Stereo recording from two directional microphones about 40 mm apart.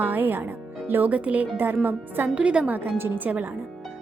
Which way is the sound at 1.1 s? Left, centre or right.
Right.